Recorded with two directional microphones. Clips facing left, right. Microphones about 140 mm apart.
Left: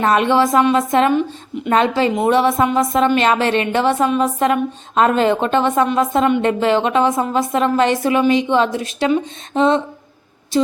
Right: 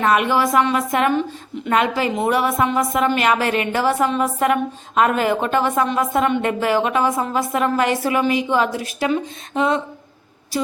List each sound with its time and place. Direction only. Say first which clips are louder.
0.0 s a woman's voice: left 3 dB; 30° left (ahead or behind)